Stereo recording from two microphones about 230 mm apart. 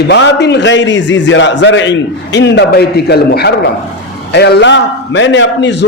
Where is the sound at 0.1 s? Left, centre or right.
Left.